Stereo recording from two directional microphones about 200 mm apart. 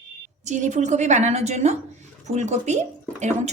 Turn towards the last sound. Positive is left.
turn(degrees=-35)  # may be behind; listen again after turning